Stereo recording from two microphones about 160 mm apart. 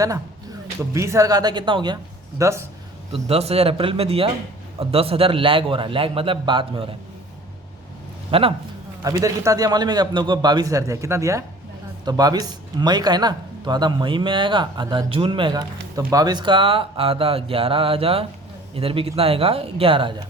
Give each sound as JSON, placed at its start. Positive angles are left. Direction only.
{"t": 0.9, "sound": "a man's voice", "side_deg": -20}
{"t": 2.4, "sound": "speech", "side_deg": -15}
{"t": 3.1, "sound": "a man's voice", "side_deg": -40}
{"t": 8.3, "sound": "a man's voice", "side_deg": -35}
{"t": 9.0, "sound": "a man's voice", "side_deg": -20}